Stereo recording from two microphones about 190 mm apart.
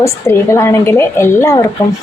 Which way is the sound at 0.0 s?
15° left (ahead or behind).